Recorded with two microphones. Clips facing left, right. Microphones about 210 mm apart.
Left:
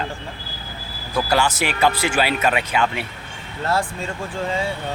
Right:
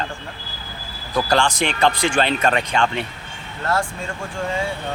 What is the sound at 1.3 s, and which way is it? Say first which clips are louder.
Speech: right 1 dB; 5° left (ahead or behind).